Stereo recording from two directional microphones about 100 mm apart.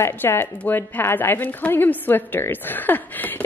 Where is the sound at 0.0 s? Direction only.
25° left (ahead or behind).